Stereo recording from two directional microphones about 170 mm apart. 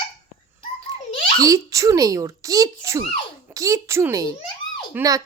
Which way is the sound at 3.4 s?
20° right (ahead or behind).